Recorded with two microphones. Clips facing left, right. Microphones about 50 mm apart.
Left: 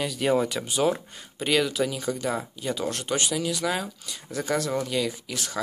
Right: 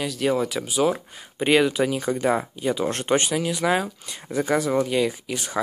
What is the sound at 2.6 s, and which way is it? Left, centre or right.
Speech, centre.